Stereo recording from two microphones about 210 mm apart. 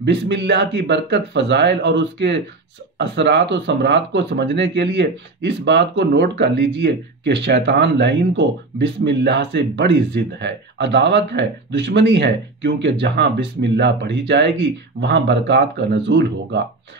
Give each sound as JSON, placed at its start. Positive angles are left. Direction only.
{"t": 0.0, "sound": "speech", "side_deg": -55}